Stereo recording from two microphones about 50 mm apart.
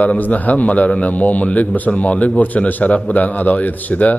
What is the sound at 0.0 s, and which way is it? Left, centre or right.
A man's voice, left.